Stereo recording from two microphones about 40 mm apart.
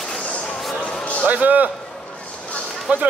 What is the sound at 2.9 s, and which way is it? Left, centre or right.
Speech, right.